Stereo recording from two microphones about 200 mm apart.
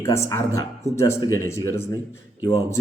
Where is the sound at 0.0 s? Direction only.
15° left (ahead or behind).